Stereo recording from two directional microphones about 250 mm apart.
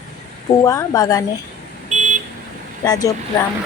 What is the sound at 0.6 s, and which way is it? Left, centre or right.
Speech, centre.